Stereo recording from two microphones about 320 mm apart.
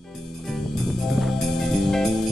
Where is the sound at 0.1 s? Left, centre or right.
Centre.